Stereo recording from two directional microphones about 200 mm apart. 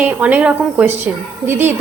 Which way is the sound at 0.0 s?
10° right (ahead or behind).